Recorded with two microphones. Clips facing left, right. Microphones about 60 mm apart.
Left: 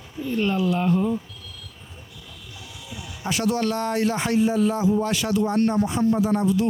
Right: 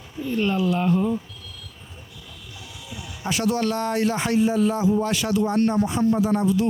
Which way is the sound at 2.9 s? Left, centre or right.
Centre.